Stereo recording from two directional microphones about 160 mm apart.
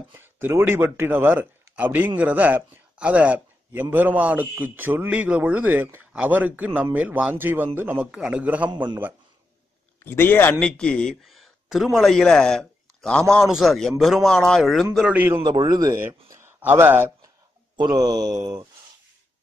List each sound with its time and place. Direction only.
0.1 s a man's voice: 15° right (ahead or behind)
9.9 s a man's voice: 15° left (ahead or behind); by 15.4 s 10° right (ahead or behind)
15.4 s mantra: 25° right (ahead or behind)
16.3 s speech: 15° right (ahead or behind)
17.7 s mantra: 25° right (ahead or behind)